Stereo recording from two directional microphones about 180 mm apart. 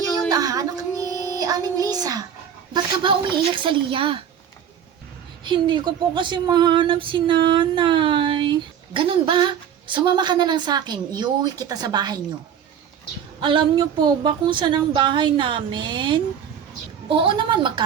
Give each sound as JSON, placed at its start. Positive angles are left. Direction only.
{"t": 0.3, "sound": "a sound", "side_deg": -20}
{"t": 2.7, "sound": "speech", "side_deg": -25}
{"t": 5.5, "sound": "speech", "side_deg": -25}
{"t": 13.4, "sound": "speech", "side_deg": -25}